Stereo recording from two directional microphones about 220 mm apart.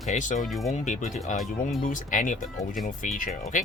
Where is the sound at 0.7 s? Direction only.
35° left (ahead or behind).